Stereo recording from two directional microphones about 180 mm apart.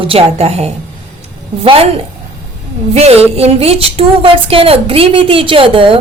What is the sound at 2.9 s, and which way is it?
A woman's voice, 35° right (ahead or behind).